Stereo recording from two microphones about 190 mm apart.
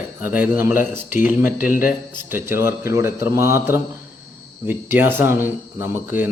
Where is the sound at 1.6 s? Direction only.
45° left (ahead or behind).